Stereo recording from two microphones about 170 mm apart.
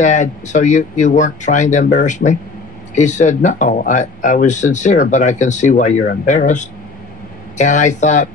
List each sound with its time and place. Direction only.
0.0 s speech: 45° left (ahead or behind)